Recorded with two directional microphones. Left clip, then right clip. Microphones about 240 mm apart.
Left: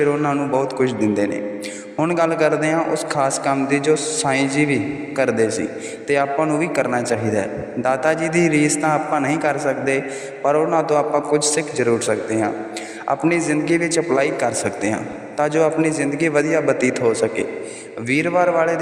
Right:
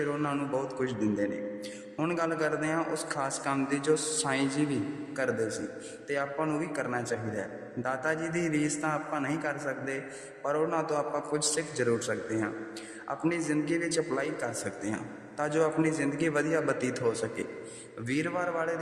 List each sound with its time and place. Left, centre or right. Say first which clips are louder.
0.0 s a man's voice: left 13 dB; left